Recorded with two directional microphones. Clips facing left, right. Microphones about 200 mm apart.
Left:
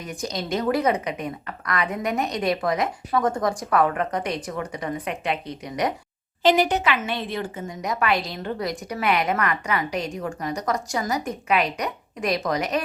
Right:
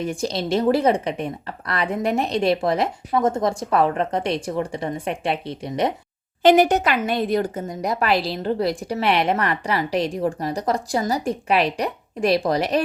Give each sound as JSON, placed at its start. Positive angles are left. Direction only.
{"t": 0.0, "sound": "speech", "side_deg": -30}
{"t": 6.4, "sound": "a woman's voice", "side_deg": -50}